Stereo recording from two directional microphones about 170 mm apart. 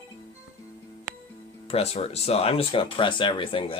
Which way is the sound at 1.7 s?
35° left (ahead or behind).